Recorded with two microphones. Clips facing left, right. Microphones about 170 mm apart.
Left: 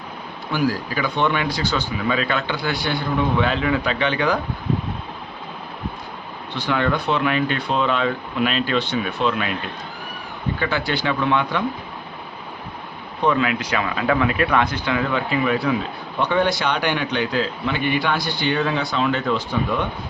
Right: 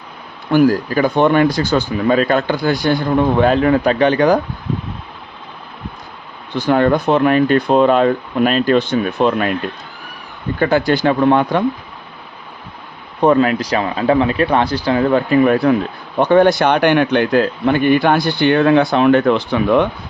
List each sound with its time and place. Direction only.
0.5 s speech: 50° right (ahead or behind)
6.6 s speech: 45° right (ahead or behind)
10.6 s speech: 45° right (ahead or behind)
13.2 s speech: 40° right (ahead or behind); by 19.9 s 80° right